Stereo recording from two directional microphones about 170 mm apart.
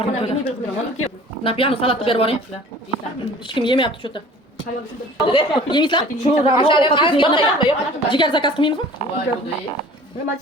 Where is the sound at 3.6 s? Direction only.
30° left (ahead or behind).